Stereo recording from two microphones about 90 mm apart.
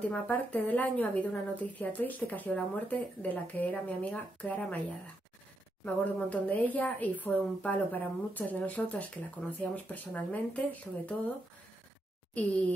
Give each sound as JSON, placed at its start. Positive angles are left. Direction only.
{"t": 0.0, "sound": "a woman's voice", "side_deg": 15}
{"t": 6.1, "sound": "a woman's voice", "side_deg": 15}
{"t": 12.4, "sound": "a woman's voice", "side_deg": 15}